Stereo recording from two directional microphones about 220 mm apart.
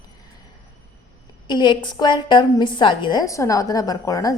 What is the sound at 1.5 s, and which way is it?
A woman's voice, 20° left (ahead or behind).